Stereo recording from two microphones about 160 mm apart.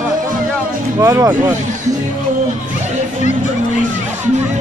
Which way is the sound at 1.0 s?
20° right (ahead or behind).